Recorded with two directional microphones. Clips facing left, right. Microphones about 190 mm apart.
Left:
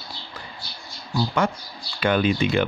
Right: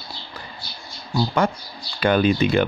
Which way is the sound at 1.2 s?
35° right (ahead or behind).